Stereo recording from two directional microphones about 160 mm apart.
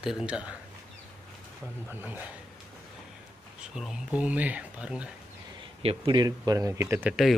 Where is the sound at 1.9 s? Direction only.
10° right (ahead or behind).